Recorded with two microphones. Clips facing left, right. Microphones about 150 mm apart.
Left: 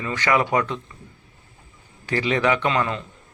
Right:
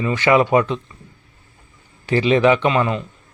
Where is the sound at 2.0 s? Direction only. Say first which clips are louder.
Right 6 dB; 20° right (ahead or behind).